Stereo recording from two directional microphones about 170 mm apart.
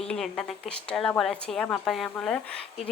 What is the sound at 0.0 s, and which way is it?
Speech, 5° left (ahead or behind).